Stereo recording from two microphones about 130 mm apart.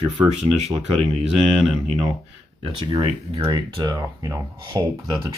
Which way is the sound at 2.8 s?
35° right (ahead or behind).